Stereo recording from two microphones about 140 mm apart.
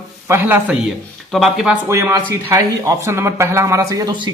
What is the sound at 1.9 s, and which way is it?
Speech, 20° right (ahead or behind).